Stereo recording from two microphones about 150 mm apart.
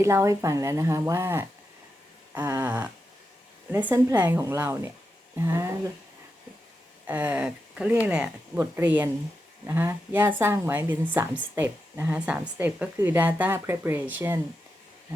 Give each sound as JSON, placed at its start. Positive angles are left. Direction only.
{"t": 0.0, "sound": "a woman's voice", "side_deg": -20}
{"t": 7.1, "sound": "a woman's voice", "side_deg": -10}